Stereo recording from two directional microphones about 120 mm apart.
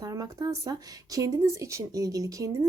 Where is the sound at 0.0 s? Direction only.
30° right (ahead or behind).